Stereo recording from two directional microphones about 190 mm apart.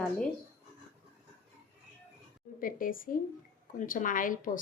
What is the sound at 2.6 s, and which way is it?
A woman's voice, 45° left (ahead or behind).